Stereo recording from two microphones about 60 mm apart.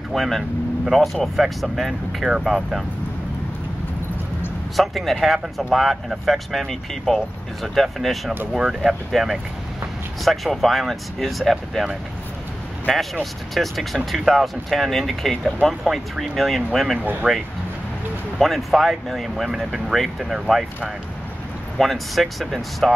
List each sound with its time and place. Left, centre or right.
0.1 s speech: centre
4.7 s speech: centre
12.9 s speech: centre
17.2 s speech: centre
18.4 s speech: centre
21.7 s speech: centre